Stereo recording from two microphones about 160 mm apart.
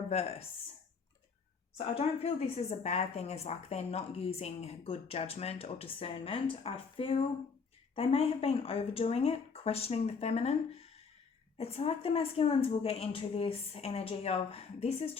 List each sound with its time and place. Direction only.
0.1 s speech: 40° left (ahead or behind)
1.8 s a woman's voice: 40° left (ahead or behind)